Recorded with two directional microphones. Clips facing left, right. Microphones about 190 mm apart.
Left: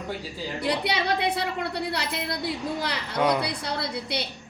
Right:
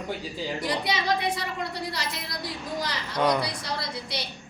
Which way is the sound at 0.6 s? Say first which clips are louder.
Left 3 dB; 65° left (ahead or behind).